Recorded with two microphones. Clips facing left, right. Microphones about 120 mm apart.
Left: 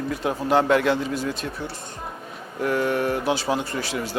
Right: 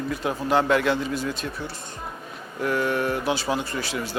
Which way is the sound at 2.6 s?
40° left (ahead or behind).